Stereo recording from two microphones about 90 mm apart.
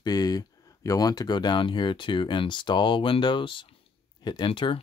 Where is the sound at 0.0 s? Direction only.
45° left (ahead or behind); by 3.7 s 65° left (ahead or behind).